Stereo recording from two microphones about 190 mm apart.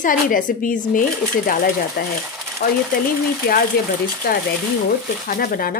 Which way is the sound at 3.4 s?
50° left (ahead or behind).